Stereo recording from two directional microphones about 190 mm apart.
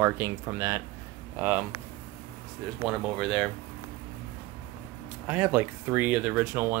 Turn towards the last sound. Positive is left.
turn(degrees=-10)  # may be behind; listen again after turning